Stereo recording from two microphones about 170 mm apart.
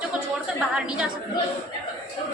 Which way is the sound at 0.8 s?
5° right (ahead or behind).